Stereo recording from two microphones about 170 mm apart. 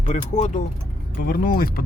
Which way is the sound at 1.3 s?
60° left (ahead or behind).